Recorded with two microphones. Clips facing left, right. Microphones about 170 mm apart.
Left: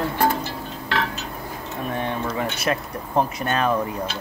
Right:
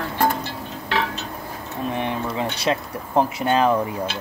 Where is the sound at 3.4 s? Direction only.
10° right (ahead or behind).